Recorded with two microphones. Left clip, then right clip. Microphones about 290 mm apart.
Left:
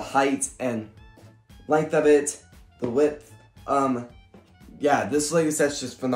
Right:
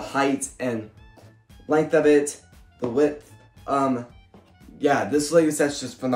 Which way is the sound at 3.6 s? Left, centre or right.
Centre.